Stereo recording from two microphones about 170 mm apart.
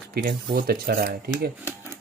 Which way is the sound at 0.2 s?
70° right (ahead or behind).